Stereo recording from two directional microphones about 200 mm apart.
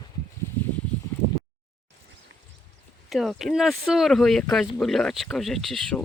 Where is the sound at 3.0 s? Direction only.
Centre (ahead or behind).